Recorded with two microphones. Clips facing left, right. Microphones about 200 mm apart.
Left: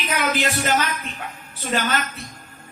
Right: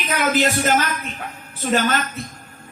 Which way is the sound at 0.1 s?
45° right (ahead or behind).